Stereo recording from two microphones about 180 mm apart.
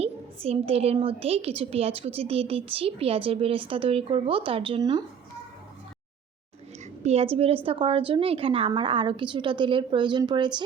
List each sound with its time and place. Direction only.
0.0 s a woman's voice: 35° right (ahead or behind)
7.0 s a woman's voice: 35° right (ahead or behind)